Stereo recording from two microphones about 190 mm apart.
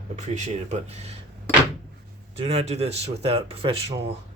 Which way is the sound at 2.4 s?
30° right (ahead or behind).